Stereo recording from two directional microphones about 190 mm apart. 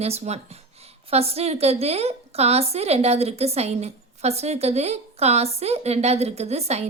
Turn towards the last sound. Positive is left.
turn(degrees=-35)  # may be behind; listen again after turning